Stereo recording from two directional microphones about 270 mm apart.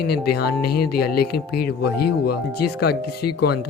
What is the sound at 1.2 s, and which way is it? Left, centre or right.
Speech, left.